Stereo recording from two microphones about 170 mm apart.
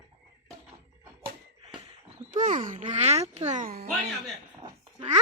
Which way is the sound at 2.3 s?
50° right (ahead or behind).